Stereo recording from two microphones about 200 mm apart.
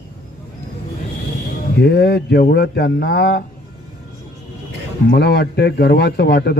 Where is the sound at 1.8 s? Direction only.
55° left (ahead or behind).